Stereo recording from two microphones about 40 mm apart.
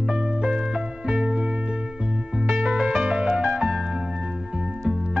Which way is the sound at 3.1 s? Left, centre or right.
Centre.